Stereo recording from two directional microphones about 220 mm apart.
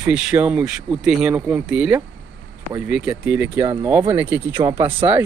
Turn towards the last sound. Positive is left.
turn(degrees=-20)  # may be behind; listen again after turning